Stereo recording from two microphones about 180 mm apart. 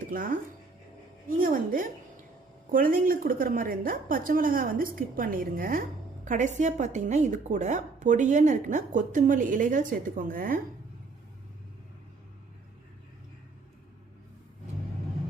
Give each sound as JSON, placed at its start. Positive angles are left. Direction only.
{"t": 0.0, "sound": "music", "side_deg": -50}
{"t": 1.3, "sound": "speech", "side_deg": -50}